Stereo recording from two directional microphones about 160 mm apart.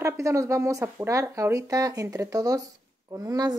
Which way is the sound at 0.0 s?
20° right (ahead or behind).